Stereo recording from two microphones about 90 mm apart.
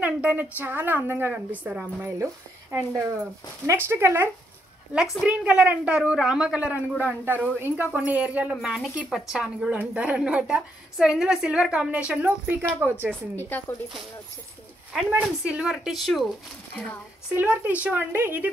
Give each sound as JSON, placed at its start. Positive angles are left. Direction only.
{"t": 0.0, "sound": "a woman's voice", "side_deg": -15}
{"t": 2.1, "sound": "a woman's voice", "side_deg": -35}
{"t": 5.2, "sound": "a woman's voice", "side_deg": -10}
{"t": 8.5, "sound": "a woman's voice", "side_deg": -5}
{"t": 13.4, "sound": "speech", "side_deg": 20}
{"t": 15.0, "sound": "a woman's voice", "side_deg": -15}
{"t": 17.3, "sound": "a woman's voice", "side_deg": -15}